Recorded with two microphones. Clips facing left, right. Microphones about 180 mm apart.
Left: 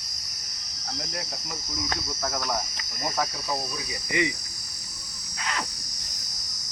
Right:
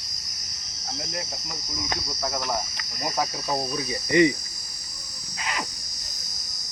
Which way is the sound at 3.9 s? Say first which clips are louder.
Right 9 dB; 35° right (ahead or behind).